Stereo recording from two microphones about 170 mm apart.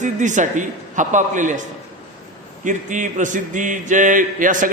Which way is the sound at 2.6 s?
50° right (ahead or behind).